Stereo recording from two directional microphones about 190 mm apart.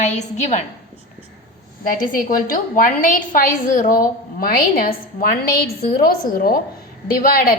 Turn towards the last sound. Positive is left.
turn(degrees=45)  # may be behind; listen again after turning